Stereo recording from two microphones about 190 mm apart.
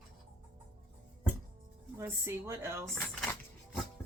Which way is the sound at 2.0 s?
10° right (ahead or behind).